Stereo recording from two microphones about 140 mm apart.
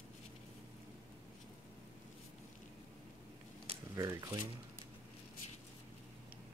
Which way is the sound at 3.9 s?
25° right (ahead or behind).